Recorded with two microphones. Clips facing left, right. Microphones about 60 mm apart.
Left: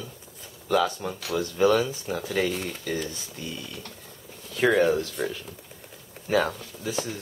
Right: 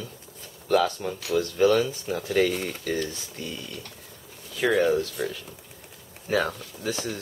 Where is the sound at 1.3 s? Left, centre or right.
Left.